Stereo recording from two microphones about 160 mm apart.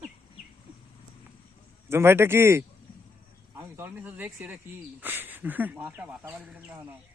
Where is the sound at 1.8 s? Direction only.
15° right (ahead or behind).